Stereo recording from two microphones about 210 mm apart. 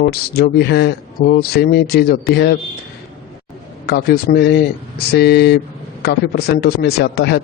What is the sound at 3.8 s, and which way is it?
A man's voice, 50° left (ahead or behind).